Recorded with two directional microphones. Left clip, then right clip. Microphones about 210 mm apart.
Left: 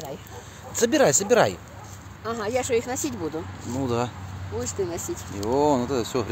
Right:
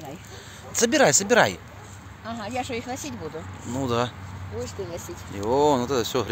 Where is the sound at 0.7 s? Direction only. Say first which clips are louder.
Right 1 dB; 5° right (ahead or behind).